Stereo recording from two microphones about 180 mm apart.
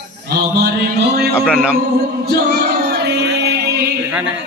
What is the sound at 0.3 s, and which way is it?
Mantra, 60° right (ahead or behind).